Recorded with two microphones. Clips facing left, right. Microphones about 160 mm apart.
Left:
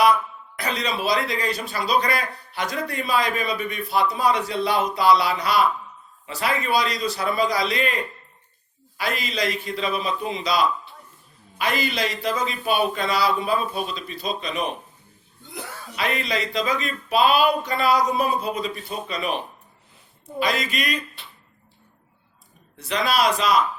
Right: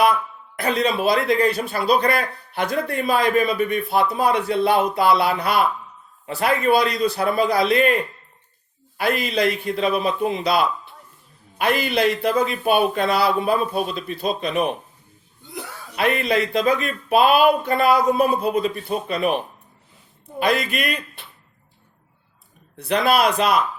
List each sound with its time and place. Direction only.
0.5 s a man's voice: 55° right (ahead or behind)
9.0 s a man's voice: 55° right (ahead or behind)
16.0 s a man's voice: 55° right (ahead or behind)
20.4 s a man's voice: 60° right (ahead or behind)
22.8 s a man's voice: 60° right (ahead or behind)